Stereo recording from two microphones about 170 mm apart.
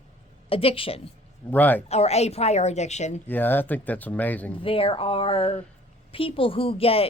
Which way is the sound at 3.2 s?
10° left (ahead or behind).